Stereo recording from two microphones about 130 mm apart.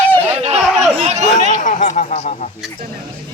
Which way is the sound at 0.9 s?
55° right (ahead or behind).